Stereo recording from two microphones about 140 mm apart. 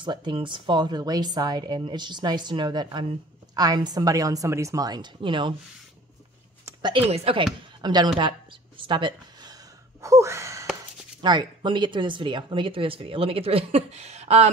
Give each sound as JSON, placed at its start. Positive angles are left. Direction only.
{"t": 0.0, "sound": "a woman's voice", "side_deg": -35}
{"t": 6.8, "sound": "speech", "side_deg": -40}
{"t": 7.8, "sound": "speech", "side_deg": -30}
{"t": 8.2, "sound": "a sound", "side_deg": -35}
{"t": 10.0, "sound": "a sound", "side_deg": -20}
{"t": 11.1, "sound": "speech", "side_deg": -30}